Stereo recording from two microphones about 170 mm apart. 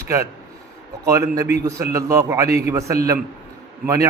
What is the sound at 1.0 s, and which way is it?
A man's voice, 20° right (ahead or behind).